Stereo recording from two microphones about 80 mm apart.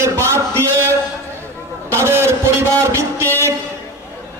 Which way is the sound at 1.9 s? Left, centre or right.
Right.